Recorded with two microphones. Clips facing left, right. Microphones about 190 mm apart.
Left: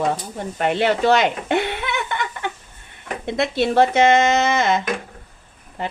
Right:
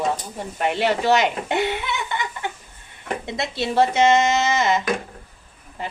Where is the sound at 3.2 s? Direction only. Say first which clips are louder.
Left 8 dB; 55° left (ahead or behind).